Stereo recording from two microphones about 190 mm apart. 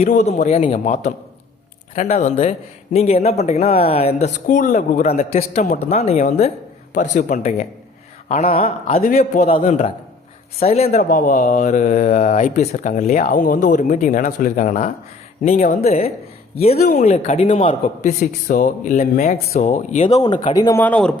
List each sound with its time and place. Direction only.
0.0 s speech: 35° left (ahead or behind)
2.0 s speech: 35° left (ahead or behind)
16.7 s speech: 45° left (ahead or behind)
20.2 s speech: 25° left (ahead or behind)
20.8 s speech: 5° left (ahead or behind)